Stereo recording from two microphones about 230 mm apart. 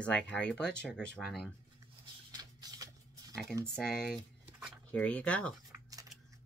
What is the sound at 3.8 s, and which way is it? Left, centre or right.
Speech, centre.